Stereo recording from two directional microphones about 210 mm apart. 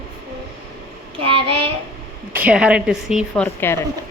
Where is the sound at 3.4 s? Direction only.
10° left (ahead or behind).